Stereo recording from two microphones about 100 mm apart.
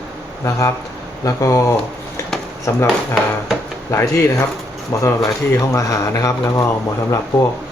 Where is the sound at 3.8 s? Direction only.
30° left (ahead or behind).